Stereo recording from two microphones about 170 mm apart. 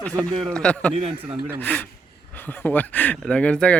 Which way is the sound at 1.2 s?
10° right (ahead or behind).